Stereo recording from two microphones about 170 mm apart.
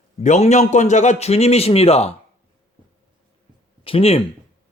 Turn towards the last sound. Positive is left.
turn(degrees=35)  # may be behind; listen again after turning